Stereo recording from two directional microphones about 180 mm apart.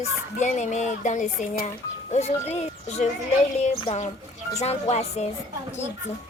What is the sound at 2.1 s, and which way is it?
Speech, 35° left (ahead or behind).